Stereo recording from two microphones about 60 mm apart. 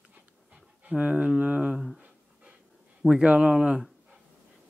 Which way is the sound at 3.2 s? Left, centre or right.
Centre.